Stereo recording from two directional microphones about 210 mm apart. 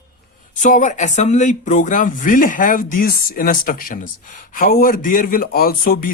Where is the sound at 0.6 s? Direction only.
35° left (ahead or behind).